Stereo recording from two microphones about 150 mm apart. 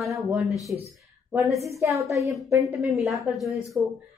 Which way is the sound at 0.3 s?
Centre (ahead or behind).